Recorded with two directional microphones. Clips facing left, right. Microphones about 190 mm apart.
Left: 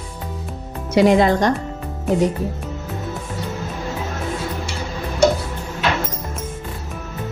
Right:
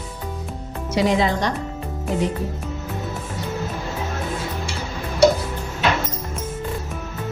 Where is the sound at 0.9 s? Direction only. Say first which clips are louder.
Left 6 dB; 55° left (ahead or behind).